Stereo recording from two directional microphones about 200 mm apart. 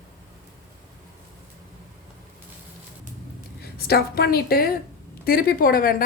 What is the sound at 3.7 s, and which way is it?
A woman's voice, 50° left (ahead or behind).